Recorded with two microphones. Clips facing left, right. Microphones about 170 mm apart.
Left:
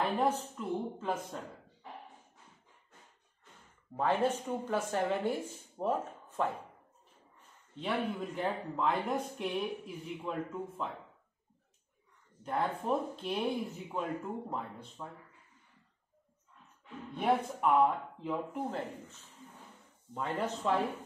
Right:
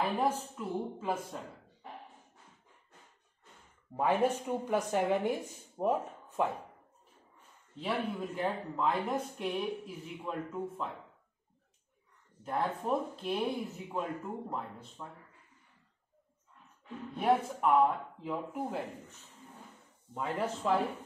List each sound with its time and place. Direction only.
0.0 s speech: 5° right (ahead or behind)
3.9 s speech: 15° right (ahead or behind)
7.7 s speech: centre (ahead or behind)
12.4 s speech: centre (ahead or behind)
17.1 s speech: centre (ahead or behind)
20.2 s speech: 5° right (ahead or behind)